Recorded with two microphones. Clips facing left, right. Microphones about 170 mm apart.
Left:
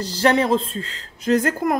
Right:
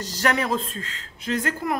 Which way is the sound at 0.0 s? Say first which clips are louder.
Left 6 dB; 30° left (ahead or behind).